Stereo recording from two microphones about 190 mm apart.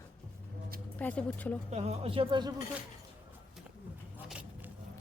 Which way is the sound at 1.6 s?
35° right (ahead or behind).